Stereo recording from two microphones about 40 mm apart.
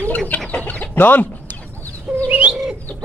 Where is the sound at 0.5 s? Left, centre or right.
Left.